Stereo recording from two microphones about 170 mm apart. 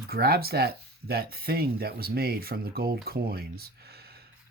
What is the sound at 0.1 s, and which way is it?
Speech, 65° right (ahead or behind).